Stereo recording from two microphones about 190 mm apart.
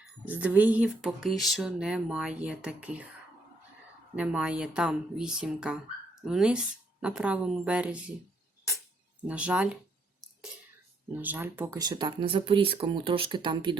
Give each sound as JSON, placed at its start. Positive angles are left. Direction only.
{"t": 0.0, "sound": "speech", "side_deg": -5}
{"t": 4.1, "sound": "speech", "side_deg": -5}
{"t": 9.2, "sound": "speech", "side_deg": -5}
{"t": 11.1, "sound": "speech", "side_deg": -10}
{"t": 11.8, "sound": "speech", "side_deg": -25}